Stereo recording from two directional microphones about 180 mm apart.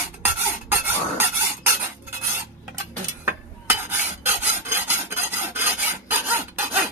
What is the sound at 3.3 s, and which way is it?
Filing, 10° right (ahead or behind).